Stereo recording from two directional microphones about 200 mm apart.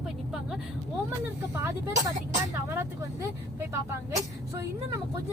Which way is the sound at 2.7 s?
15° right (ahead or behind).